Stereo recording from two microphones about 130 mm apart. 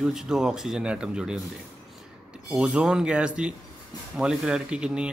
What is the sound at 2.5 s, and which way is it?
Speech, 5° right (ahead or behind).